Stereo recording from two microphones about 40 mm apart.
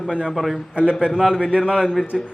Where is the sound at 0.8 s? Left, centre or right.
Centre.